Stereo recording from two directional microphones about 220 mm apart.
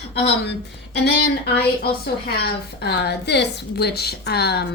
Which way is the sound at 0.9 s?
50° left (ahead or behind).